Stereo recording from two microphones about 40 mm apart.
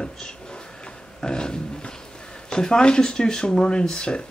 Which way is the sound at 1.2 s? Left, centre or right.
Centre.